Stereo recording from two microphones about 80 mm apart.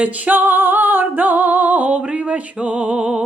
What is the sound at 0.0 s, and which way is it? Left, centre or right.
Music, centre.